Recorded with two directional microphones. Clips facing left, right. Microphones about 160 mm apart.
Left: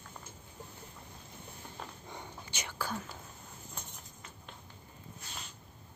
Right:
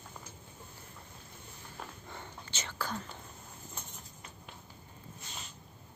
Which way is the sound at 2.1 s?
15° left (ahead or behind).